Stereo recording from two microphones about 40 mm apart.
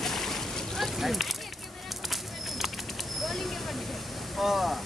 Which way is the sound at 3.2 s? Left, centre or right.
Centre.